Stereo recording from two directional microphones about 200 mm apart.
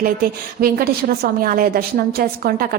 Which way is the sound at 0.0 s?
45° right (ahead or behind).